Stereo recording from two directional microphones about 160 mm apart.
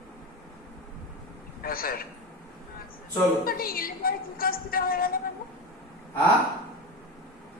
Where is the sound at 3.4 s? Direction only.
65° left (ahead or behind).